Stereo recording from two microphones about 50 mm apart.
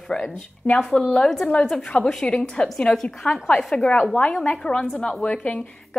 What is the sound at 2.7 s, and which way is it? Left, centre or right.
Speech, centre.